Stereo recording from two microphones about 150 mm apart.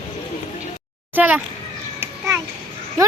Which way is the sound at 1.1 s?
10° right (ahead or behind).